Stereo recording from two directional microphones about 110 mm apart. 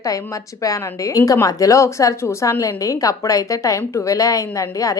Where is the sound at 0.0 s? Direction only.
30° left (ahead or behind).